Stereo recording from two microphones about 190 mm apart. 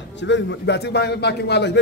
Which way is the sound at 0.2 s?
70° left (ahead or behind).